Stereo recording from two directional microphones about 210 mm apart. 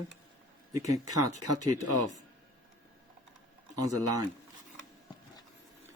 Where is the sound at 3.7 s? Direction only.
15° right (ahead or behind).